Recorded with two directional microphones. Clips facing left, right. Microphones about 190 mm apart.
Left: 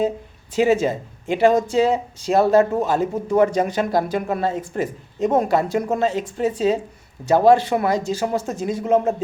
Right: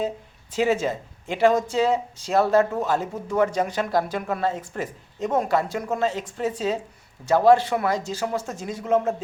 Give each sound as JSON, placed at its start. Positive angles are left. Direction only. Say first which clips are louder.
{"t": 0.5, "sound": "speech", "louder": "left 5 dB", "side_deg": 10}